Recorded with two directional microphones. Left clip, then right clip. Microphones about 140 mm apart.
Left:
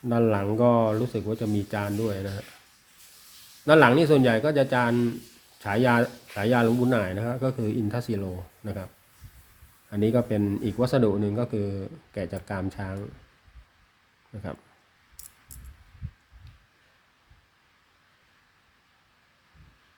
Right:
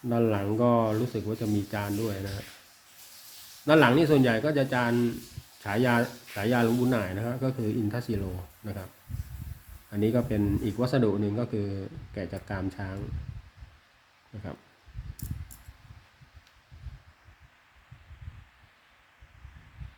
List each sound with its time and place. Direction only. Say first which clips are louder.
0.1 s a man's voice: left 3 dB; 30° left (ahead or behind)
3.7 s a man's voice: left 3 dB; 30° left (ahead or behind)
9.9 s a man's voice: left 3 dB; 35° left (ahead or behind)